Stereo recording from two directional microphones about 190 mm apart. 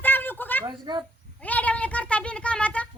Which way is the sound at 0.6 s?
20° right (ahead or behind).